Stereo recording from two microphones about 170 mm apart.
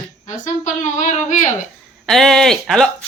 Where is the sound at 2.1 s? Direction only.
Centre (ahead or behind).